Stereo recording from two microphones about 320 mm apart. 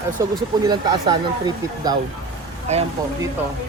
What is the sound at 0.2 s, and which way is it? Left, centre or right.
Speech, centre.